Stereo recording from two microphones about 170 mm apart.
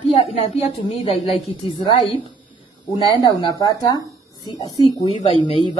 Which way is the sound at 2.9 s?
25° left (ahead or behind).